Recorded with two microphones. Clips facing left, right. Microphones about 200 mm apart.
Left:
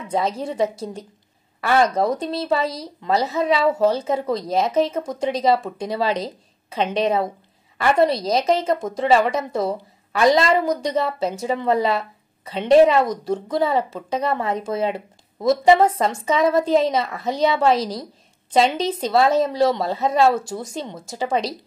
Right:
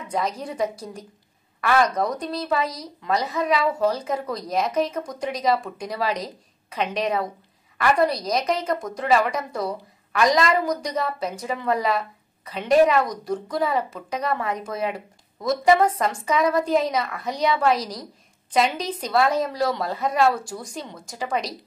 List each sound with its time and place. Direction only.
0.1 s speech: 25° left (ahead or behind)